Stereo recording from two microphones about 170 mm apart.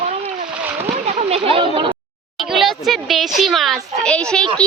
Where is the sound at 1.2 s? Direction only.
35° right (ahead or behind).